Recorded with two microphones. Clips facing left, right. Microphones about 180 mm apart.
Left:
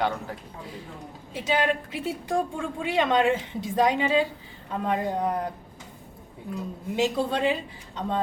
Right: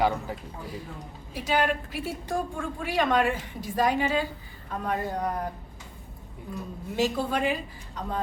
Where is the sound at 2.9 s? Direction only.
25° left (ahead or behind).